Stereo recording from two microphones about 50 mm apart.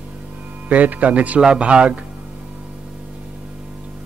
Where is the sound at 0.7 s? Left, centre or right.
Right.